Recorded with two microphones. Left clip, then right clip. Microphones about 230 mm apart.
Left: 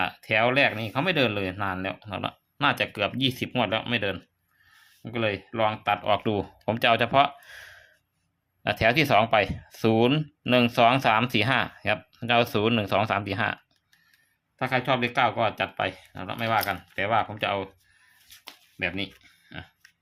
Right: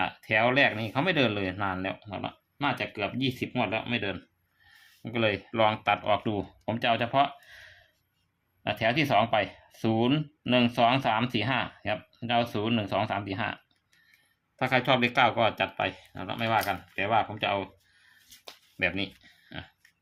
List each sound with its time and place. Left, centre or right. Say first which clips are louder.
0.0 s speech: left 2 dB; centre
5.0 s speech: even; centre
14.6 s speech: even; centre
18.8 s speech: right 1 dB; centre